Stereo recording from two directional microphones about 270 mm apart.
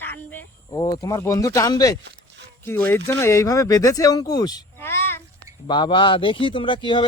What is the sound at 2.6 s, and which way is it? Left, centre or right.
Speech, centre.